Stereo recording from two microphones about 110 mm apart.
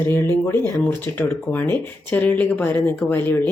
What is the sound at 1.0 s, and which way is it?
Speech, 20° left (ahead or behind).